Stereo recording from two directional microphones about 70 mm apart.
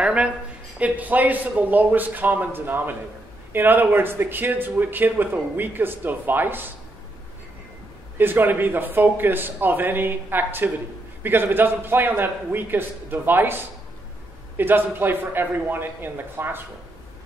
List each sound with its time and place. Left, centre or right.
0.0 s speech: centre
8.2 s a man's voice: right
14.6 s a man's voice: right